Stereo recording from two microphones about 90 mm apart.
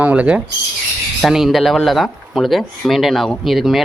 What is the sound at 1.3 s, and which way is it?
Speech, 5° right (ahead or behind).